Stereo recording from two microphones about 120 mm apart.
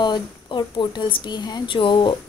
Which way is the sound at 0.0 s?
40° left (ahead or behind).